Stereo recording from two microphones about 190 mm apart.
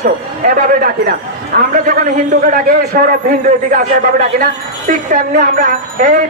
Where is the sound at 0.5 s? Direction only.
50° right (ahead or behind).